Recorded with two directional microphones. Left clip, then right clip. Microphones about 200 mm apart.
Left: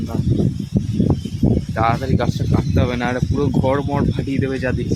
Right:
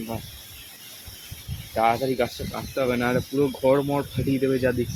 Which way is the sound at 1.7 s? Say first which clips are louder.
Even; 10° left (ahead or behind).